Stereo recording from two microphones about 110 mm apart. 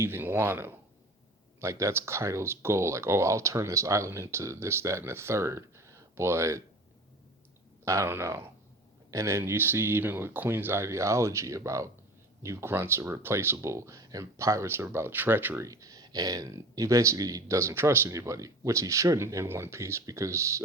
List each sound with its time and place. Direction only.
0.0 s speech: 20° right (ahead or behind)
7.9 s speech: 25° right (ahead or behind)
15.6 s speech: 30° right (ahead or behind)